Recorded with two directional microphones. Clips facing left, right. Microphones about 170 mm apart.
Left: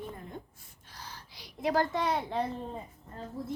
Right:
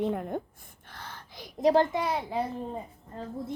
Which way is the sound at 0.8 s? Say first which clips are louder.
Right 3 dB; 55° right (ahead or behind).